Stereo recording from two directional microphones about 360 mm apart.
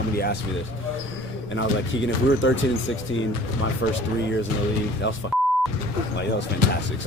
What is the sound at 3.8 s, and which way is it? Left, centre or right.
Speech, left.